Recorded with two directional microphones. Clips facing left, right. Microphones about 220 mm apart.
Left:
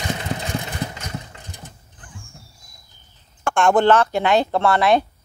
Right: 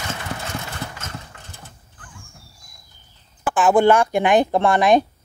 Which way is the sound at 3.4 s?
5° right (ahead or behind).